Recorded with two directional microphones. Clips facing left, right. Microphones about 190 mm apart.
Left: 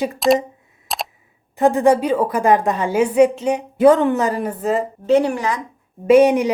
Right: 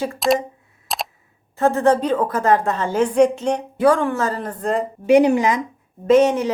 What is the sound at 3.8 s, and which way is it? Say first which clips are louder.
Speech: left 4 dB; 20° left (ahead or behind).